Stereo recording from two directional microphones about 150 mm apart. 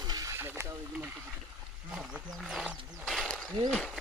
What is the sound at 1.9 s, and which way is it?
Speech, 5° right (ahead or behind).